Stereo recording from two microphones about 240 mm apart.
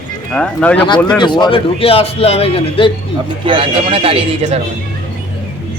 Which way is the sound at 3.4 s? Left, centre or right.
Right.